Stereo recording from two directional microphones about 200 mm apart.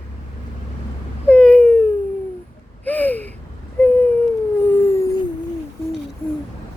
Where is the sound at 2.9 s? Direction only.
10° left (ahead or behind).